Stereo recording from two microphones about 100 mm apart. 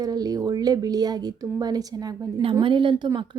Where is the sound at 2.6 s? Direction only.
55° right (ahead or behind).